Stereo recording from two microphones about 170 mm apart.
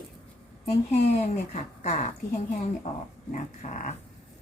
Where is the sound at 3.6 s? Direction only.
45° left (ahead or behind).